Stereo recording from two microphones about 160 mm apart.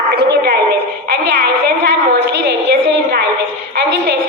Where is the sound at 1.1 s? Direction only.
90° right.